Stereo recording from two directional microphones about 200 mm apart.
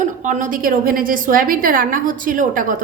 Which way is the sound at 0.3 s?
40° right (ahead or behind).